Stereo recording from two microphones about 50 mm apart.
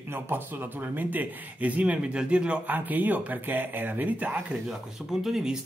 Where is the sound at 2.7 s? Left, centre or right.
Right.